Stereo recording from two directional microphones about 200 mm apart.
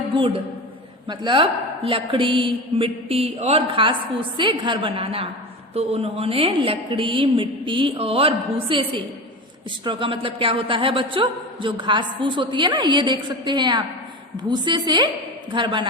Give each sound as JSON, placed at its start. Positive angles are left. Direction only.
{"t": 0.1, "sound": "a woman's voice", "side_deg": -25}